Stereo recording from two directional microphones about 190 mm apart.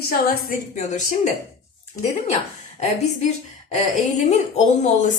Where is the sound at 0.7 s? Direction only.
40° left (ahead or behind).